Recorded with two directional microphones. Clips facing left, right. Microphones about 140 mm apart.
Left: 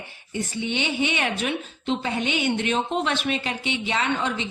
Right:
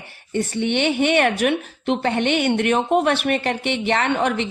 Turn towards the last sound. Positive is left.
turn(degrees=-65)  # may be behind; listen again after turning